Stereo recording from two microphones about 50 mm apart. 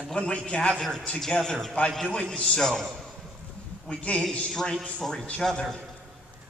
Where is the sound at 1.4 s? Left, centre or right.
Centre.